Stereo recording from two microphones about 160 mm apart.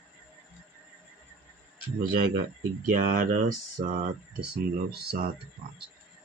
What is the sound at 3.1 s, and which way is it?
Speech, 60° right (ahead or behind).